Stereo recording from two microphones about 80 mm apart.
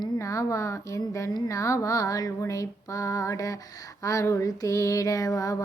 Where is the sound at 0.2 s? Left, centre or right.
Left.